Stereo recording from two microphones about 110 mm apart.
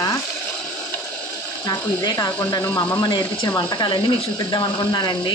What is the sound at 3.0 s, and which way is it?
Speech, 40° left (ahead or behind).